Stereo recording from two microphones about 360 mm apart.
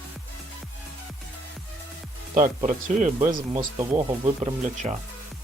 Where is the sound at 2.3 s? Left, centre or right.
Right.